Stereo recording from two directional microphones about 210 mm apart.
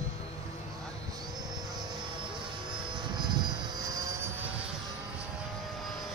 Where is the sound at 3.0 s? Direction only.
20° right (ahead or behind).